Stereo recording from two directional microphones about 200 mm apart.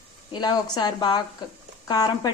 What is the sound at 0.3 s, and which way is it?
Sizzle, 20° left (ahead or behind).